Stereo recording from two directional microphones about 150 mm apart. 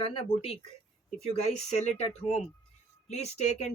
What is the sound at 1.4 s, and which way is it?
Speech, 45° left (ahead or behind).